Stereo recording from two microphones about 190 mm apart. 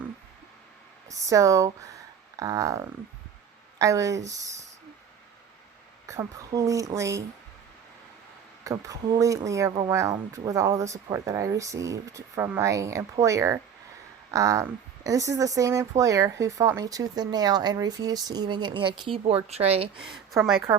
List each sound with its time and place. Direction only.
1.2 s speech: 15° right (ahead or behind)
6.1 s speech: 15° right (ahead or behind)
8.6 s speech: 15° right (ahead or behind); by 19.9 s 30° right (ahead or behind)
20.0 s speech: 5° right (ahead or behind)